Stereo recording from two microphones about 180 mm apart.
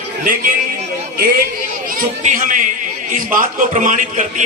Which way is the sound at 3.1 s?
45° right (ahead or behind).